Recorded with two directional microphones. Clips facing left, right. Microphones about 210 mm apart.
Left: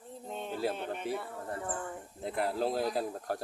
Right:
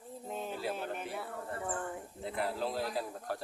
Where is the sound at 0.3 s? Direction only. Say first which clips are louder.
Left 3 dB; centre (ahead or behind).